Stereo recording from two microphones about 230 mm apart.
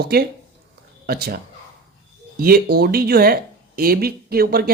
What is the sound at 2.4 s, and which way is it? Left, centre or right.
Speech, right.